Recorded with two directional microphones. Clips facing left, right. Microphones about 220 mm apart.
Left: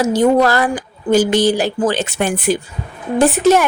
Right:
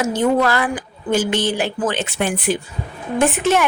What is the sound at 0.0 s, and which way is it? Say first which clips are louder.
Speech: left 4 dB; 35° left (ahead or behind).